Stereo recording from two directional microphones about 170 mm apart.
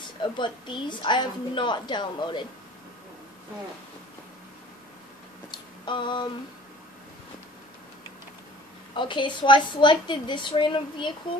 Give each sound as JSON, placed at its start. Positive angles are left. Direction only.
{"t": 0.2, "sound": "a woman's voice", "side_deg": 25}
{"t": 5.5, "sound": "a sound", "side_deg": 25}
{"t": 8.9, "sound": "a woman's voice", "side_deg": 30}